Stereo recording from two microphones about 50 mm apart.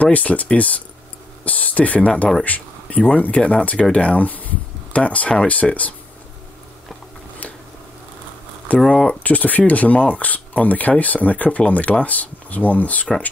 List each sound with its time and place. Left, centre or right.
0.0 s speech: left
2.4 s a sound: left
3.2 s speech: left
8.6 s speech: left
9.2 s speech: left